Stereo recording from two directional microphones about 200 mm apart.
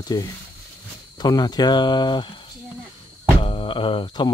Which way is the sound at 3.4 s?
25° left (ahead or behind).